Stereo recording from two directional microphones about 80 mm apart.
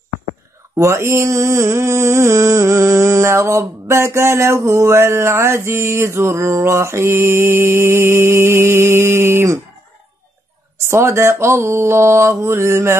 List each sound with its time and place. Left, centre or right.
0.7 s mantra: right
10.8 s mantra: right